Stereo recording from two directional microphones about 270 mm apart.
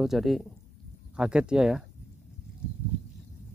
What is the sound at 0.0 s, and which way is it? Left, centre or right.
Speech, centre.